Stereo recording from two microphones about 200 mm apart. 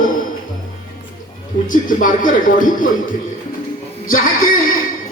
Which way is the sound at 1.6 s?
40° left (ahead or behind).